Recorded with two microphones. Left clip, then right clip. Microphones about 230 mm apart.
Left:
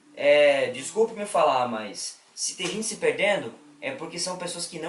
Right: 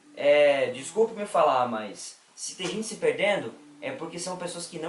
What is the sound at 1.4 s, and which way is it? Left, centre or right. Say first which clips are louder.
Speech: even; right.